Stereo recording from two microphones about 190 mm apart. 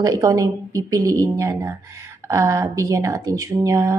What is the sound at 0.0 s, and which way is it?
Speech, 20° right (ahead or behind).